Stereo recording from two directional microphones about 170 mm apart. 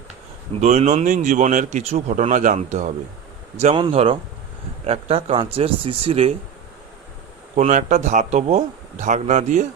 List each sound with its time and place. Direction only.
0.5 s speech: 40° right (ahead or behind)
3.8 s a man's voice: 30° right (ahead or behind)
7.5 s speech: 45° right (ahead or behind)